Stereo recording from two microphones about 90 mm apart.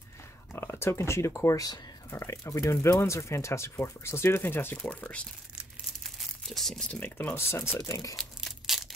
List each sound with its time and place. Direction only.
0.5 s speech: 25° left (ahead or behind)
6.0 s crumpling: 5° left (ahead or behind)
7.0 s speech: 20° left (ahead or behind)
7.8 s speech: 40° left (ahead or behind)
8.2 s a sound: centre (ahead or behind)